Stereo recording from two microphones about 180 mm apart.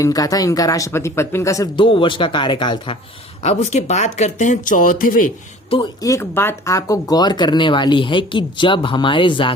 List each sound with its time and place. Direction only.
0.0 s speech: 20° left (ahead or behind)
3.4 s speech: 40° left (ahead or behind)
5.7 s speech: 25° left (ahead or behind)